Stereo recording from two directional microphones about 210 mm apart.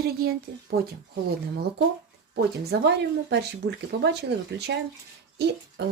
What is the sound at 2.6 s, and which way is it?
Speech, 50° right (ahead or behind).